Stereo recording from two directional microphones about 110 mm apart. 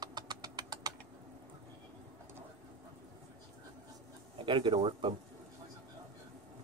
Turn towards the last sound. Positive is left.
turn(degrees=-45)  # may be behind; listen again after turning